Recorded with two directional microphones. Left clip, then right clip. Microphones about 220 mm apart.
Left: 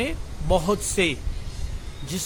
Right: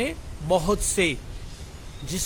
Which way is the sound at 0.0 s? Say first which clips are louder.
Even; 10° right (ahead or behind).